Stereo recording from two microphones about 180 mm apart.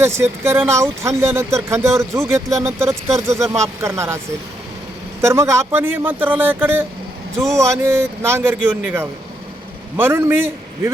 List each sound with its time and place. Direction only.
0.0 s speech: 15° right (ahead or behind)
5.2 s speech: 15° right (ahead or behind)